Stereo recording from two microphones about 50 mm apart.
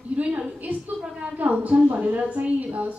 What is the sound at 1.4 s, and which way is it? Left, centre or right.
A woman's voice, right.